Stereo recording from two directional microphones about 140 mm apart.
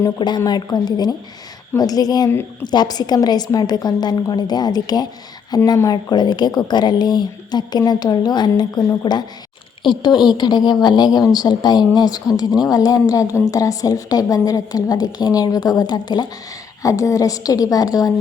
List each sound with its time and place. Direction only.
0.0 s a woman's voice: 30° left (ahead or behind)
2.3 s a woman's voice: 15° left (ahead or behind)
2.6 s a woman's voice: 30° left (ahead or behind)